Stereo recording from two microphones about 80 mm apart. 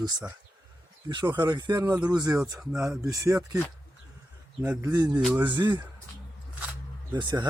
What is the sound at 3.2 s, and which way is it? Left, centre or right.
Speech, right.